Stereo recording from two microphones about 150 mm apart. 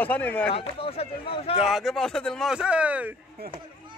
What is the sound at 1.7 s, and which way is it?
Speech, centre (ahead or behind).